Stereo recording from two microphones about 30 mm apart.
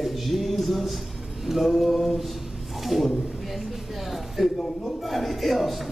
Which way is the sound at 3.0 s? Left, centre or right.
Centre.